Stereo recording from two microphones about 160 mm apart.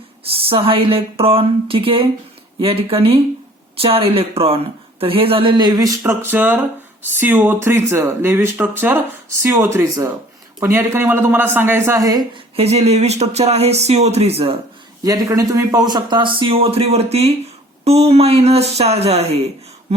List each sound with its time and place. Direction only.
0.3 s speech: 35° right (ahead or behind)
12.5 s speech: 40° right (ahead or behind)
15.0 s speech: 20° right (ahead or behind); by 19.5 s 40° right (ahead or behind)